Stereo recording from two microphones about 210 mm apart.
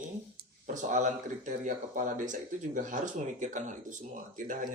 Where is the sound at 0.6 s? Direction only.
35° right (ahead or behind).